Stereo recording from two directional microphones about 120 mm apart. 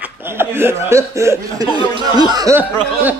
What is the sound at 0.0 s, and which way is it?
Speech, 20° right (ahead or behind).